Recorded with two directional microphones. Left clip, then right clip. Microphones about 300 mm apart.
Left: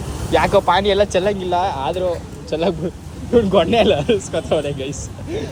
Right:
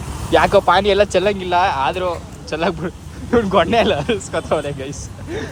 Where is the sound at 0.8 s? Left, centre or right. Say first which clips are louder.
Right 1 dB; centre.